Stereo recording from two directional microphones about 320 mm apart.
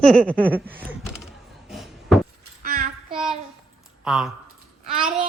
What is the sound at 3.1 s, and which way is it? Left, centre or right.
Child singing, centre.